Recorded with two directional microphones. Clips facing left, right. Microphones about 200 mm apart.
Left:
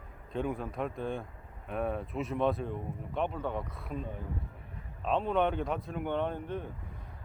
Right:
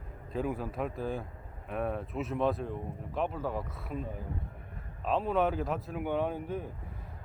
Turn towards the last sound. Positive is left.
turn(degrees=-5)  # may be behind; listen again after turning